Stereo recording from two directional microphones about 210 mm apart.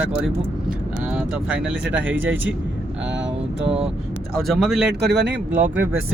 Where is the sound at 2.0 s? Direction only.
65° right (ahead or behind).